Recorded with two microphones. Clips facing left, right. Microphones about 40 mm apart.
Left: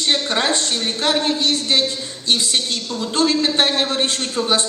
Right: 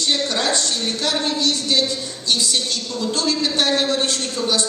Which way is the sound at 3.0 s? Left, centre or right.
Left.